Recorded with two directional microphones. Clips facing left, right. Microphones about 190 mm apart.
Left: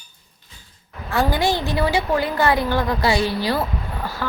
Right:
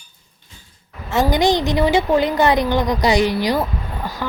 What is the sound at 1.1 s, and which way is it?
Speech, 20° right (ahead or behind).